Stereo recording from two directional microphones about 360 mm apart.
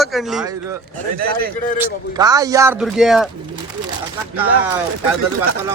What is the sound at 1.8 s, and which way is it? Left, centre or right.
Speech, centre.